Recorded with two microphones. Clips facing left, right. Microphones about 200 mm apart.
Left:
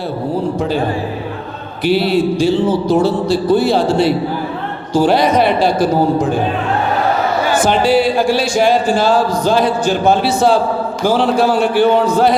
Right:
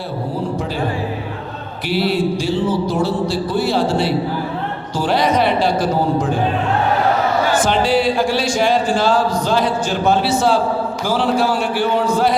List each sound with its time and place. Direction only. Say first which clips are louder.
1.8 s music: left 5 dB; 25° left (ahead or behind)
4.9 s a man's voice: left 5 dB; 10° left (ahead or behind)
7.4 s a man's voice: left 3 dB; 10° left (ahead or behind)
11.0 s music: left 5 dB; 20° left (ahead or behind)